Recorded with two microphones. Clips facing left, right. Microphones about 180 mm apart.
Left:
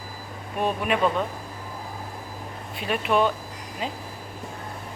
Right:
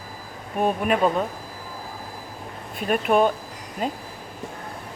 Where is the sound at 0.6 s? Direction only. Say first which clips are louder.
Right 3 dB; 45° right (ahead or behind).